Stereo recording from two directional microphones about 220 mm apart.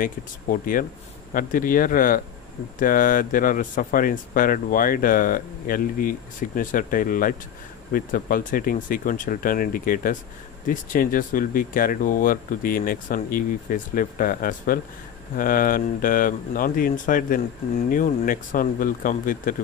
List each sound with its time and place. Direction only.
0.0 s speech: 40° left (ahead or behind)